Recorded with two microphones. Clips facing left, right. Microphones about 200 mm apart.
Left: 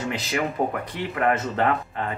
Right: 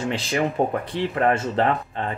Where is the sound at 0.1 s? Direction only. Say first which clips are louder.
Right 3 dB; 30° right (ahead or behind).